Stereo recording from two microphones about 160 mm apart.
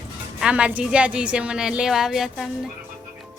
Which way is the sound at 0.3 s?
5° right (ahead or behind).